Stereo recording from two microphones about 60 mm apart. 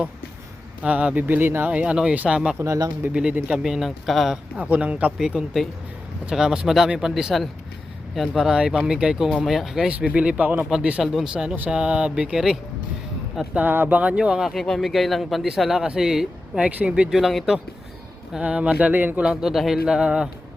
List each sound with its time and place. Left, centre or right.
0.8 s speech: right
1.7 s speech: centre
4.5 s speech: right
5.1 s speech: centre
8.5 s speech: centre
10.1 s speech: right
11.0 s speech: centre
13.5 s speech: right
14.2 s speech: centre
14.5 s speech: centre
16.6 s speech: right
17.1 s speech: centre
18.3 s speech: centre
19.2 s speech: centre